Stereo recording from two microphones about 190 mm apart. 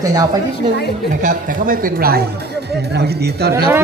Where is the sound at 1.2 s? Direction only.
45° right (ahead or behind).